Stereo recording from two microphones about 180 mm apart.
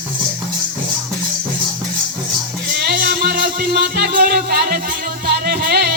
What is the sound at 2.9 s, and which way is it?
Music, 55° right (ahead or behind).